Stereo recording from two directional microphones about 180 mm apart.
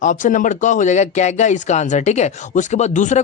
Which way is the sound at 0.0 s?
45° left (ahead or behind).